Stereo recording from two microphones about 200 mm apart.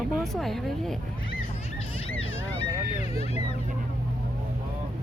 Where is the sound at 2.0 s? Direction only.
30° left (ahead or behind).